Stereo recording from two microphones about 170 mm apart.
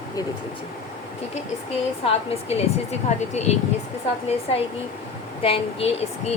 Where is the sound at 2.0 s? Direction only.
35° left (ahead or behind).